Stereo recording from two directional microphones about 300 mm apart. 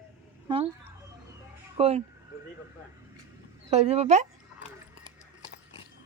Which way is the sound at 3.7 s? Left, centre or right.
Right.